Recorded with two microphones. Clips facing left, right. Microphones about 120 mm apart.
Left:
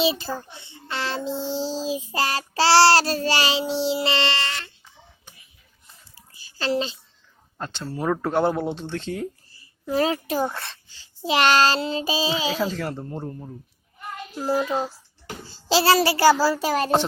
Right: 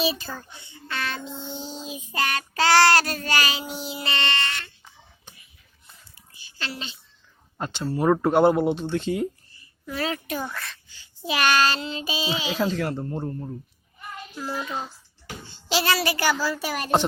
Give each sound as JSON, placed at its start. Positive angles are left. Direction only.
{"t": 0.0, "sound": "speech", "side_deg": 25}
{"t": 6.1, "sound": "a sound", "side_deg": 35}
{"t": 7.6, "sound": "speech", "side_deg": -10}
{"t": 9.6, "sound": "a child's voice", "side_deg": 35}
{"t": 12.7, "sound": "speech", "side_deg": 0}
{"t": 14.3, "sound": "a child's voice", "side_deg": 40}